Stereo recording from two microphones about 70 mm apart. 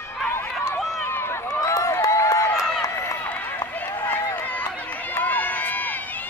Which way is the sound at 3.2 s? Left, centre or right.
Left.